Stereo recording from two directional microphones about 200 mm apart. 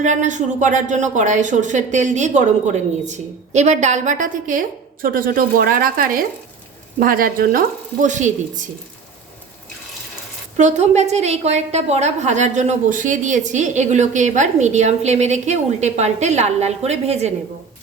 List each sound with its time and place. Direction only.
0.0 s a woman's voice: 35° right (ahead or behind)
10.6 s a woman's voice: 35° right (ahead or behind)